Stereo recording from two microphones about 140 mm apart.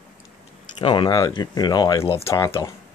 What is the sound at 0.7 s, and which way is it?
Speech, 35° left (ahead or behind).